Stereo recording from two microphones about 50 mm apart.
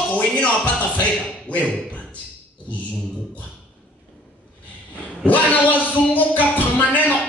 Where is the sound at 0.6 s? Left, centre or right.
Left.